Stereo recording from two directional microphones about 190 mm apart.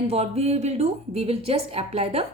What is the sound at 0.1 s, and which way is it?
A woman's voice, 35° right (ahead or behind).